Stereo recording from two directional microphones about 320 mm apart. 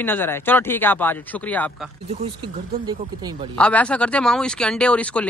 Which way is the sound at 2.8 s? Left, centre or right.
Centre.